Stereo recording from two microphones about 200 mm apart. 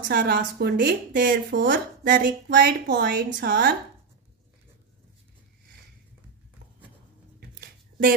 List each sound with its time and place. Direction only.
0.1 s a woman's voice: 55° right (ahead or behind)